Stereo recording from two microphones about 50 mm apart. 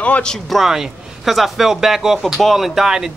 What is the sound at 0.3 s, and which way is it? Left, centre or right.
A man's voice, centre.